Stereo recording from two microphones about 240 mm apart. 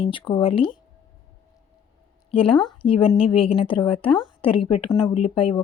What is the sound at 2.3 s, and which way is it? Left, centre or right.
Speech, left.